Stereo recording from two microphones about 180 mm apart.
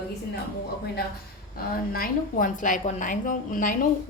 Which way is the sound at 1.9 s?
50° left (ahead or behind).